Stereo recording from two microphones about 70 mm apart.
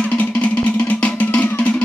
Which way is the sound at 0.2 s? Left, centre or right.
Left.